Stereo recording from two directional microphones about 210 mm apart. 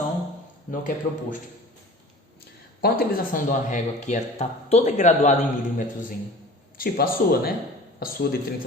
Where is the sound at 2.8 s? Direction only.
40° left (ahead or behind).